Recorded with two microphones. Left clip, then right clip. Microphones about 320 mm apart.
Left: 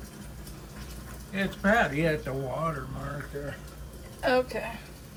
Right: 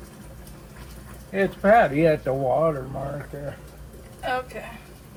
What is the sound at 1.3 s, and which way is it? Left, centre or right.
Speech, centre.